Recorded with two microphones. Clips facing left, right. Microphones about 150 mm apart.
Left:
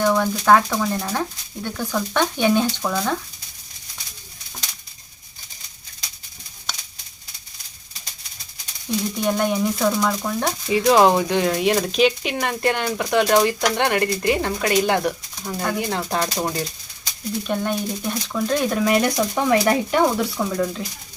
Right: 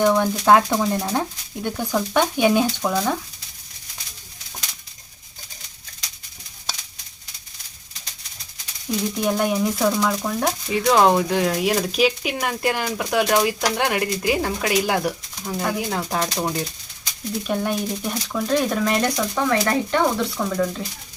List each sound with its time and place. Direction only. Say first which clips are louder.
0.0 s speech: right 1 dB; 10° right (ahead or behind)
8.9 s speech: even; centre (ahead or behind)
20.3 s speech: even; centre (ahead or behind)